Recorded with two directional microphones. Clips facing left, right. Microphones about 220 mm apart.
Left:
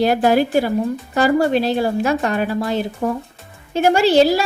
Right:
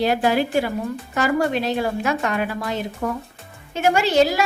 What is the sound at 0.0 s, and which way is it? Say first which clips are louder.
A woman's voice: left 4 dB; 45° left (ahead or behind).